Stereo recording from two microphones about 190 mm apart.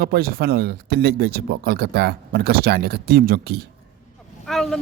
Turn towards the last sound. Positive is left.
turn(degrees=0)  # may be behind; listen again after turning